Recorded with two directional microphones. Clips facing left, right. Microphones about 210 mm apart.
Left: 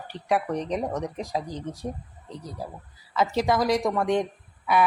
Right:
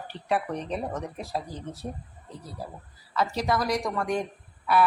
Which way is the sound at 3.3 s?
20° left (ahead or behind).